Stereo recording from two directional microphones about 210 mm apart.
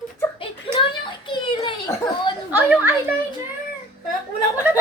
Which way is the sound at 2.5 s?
10° right (ahead or behind).